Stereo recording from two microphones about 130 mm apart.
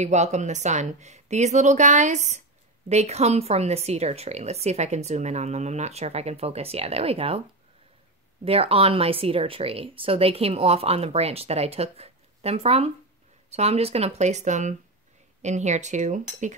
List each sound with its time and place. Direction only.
0.0 s a woman's voice: 60° right (ahead or behind)
2.9 s a woman's voice: 55° right (ahead or behind)
8.5 s a woman's voice: 50° right (ahead or behind); by 16.5 s 70° right (ahead or behind)